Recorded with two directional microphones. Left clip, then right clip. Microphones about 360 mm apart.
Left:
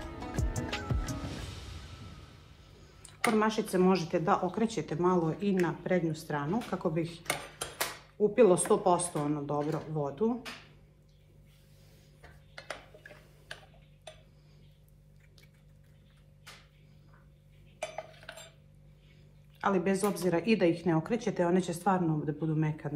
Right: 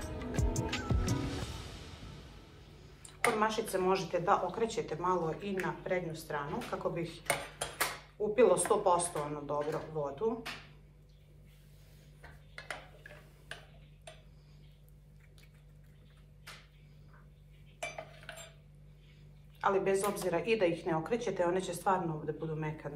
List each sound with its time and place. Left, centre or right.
0.3 s music: centre
3.1 s speech: centre
8.2 s speech: left
19.6 s speech: left